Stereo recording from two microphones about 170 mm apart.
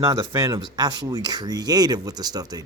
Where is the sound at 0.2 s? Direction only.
20° right (ahead or behind).